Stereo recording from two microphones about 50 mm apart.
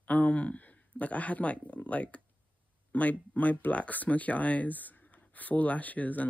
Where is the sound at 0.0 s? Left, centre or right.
Left.